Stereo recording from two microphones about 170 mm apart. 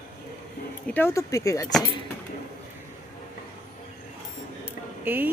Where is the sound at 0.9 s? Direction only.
15° left (ahead or behind).